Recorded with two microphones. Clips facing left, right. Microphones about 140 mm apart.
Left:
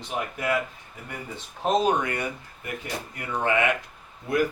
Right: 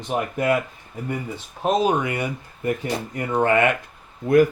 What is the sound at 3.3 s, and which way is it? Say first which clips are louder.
Speech: right 6 dB; 50° right (ahead or behind).